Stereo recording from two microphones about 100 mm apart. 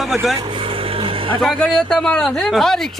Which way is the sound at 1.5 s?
5° left (ahead or behind).